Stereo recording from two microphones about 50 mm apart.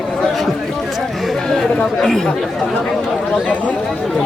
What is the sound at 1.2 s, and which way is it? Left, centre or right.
Chatter, centre.